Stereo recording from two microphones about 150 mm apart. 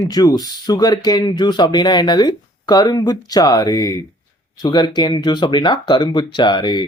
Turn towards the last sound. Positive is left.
turn(degrees=30)  # may be behind; listen again after turning